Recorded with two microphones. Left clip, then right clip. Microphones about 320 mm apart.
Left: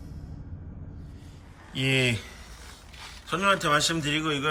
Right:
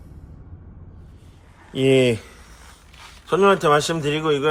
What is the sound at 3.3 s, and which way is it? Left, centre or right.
Speech, centre.